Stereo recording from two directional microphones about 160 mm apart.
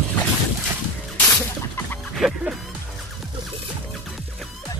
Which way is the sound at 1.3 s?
10° left (ahead or behind).